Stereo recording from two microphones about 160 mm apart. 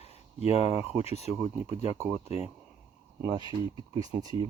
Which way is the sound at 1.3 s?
15° right (ahead or behind).